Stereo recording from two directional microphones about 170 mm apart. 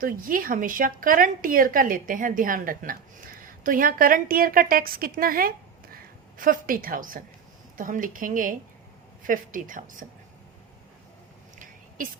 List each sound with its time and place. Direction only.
0.0 s a woman's voice: 55° right (ahead or behind)